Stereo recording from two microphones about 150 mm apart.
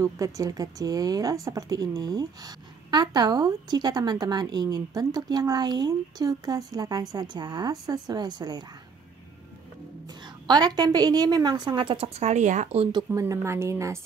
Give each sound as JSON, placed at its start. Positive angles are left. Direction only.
{"t": 0.0, "sound": "speech", "side_deg": -20}
{"t": 10.4, "sound": "speech", "side_deg": -30}
{"t": 12.9, "sound": "speech", "side_deg": -20}